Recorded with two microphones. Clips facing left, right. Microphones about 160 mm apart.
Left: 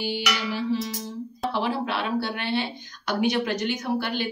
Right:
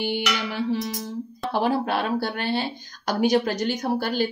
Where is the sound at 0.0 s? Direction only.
55° right (ahead or behind).